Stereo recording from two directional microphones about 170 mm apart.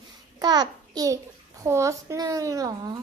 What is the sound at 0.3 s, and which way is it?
A child's voice, 25° right (ahead or behind).